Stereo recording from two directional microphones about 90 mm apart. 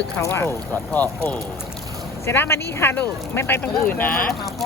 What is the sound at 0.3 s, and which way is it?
Speech, 25° left (ahead or behind).